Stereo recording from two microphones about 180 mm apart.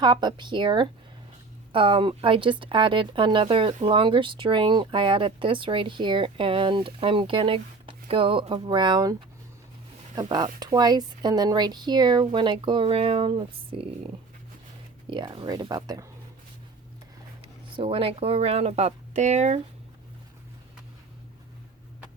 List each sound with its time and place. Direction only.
0.0 s speech: 25° right (ahead or behind)
10.2 s speech: 25° right (ahead or behind)
15.1 s speech: 25° right (ahead or behind)
17.7 s speech: 30° right (ahead or behind)